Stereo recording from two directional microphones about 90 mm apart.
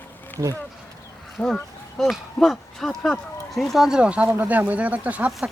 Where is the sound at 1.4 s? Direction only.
10° left (ahead or behind).